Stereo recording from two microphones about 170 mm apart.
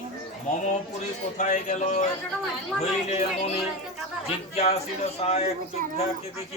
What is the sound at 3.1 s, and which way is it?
Speech, 40° left (ahead or behind).